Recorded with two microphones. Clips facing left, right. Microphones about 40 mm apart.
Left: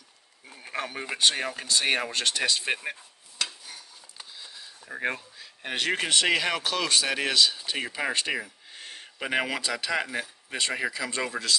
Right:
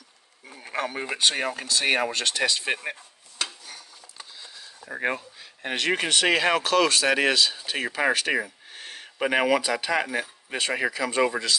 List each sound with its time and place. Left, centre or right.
0.5 s speech: centre
1.6 s speech: centre
2.0 s a sound: centre
4.7 s speech: centre
6.3 s speech: right
6.6 s speech: right
7.1 s speech: right
8.3 s a sound: centre
9.2 s speech: centre